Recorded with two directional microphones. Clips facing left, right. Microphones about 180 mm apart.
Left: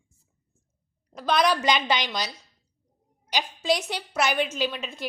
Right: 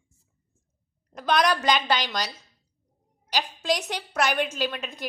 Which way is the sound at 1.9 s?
15° left (ahead or behind).